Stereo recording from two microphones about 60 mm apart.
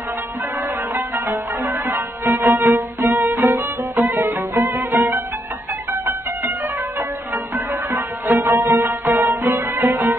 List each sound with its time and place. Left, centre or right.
1.1 s music: right
2.2 s music: right
2.5 s violin: right
3.1 s music: right
4.3 s music: right
7.5 s music: right
8.5 s music: right